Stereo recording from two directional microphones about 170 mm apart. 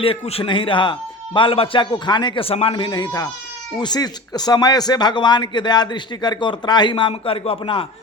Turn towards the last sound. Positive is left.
turn(degrees=30)  # may be behind; listen again after turning